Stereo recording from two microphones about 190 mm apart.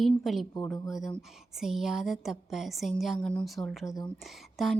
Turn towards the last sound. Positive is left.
turn(degrees=0)  # may be behind; listen again after turning